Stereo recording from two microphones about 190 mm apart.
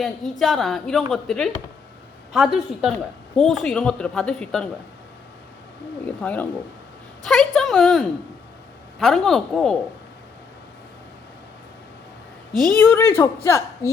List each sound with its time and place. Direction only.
0.0 s a woman's voice: centre (ahead or behind)
6.1 s a woman's voice: 10° left (ahead or behind)
12.7 s a woman's voice: 10° left (ahead or behind)